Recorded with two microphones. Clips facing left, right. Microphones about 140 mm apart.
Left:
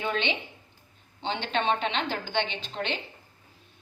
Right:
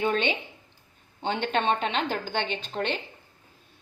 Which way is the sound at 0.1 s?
45° right (ahead or behind).